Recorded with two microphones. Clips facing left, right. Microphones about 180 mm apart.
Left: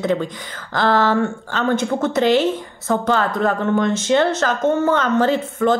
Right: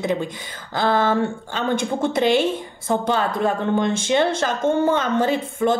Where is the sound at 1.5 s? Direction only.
10° right (ahead or behind).